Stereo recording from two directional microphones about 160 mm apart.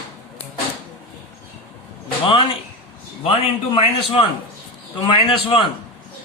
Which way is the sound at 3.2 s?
35° left (ahead or behind).